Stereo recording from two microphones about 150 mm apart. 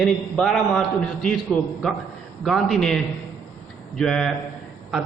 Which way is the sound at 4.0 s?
5° left (ahead or behind).